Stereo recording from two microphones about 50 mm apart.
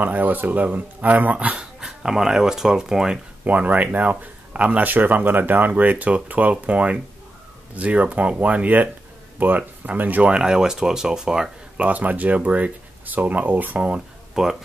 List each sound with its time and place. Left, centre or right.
0.0 s speech: right; by 3.2 s centre
3.4 s speech: right
4.9 s speech: right
10.3 s speech: centre
11.8 s speech: right
14.3 s speech: centre